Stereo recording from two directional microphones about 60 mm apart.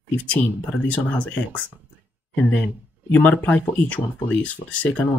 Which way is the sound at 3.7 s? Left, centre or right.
Left.